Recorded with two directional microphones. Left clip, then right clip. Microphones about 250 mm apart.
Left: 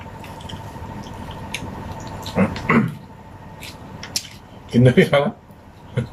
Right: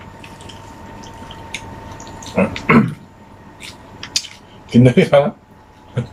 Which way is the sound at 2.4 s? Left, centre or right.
Centre.